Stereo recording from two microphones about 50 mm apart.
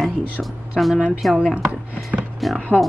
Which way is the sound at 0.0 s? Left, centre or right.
Centre.